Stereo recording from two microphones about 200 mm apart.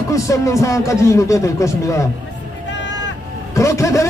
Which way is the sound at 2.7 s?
65° left (ahead or behind).